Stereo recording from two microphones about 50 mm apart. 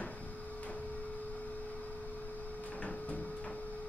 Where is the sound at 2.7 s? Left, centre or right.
Left.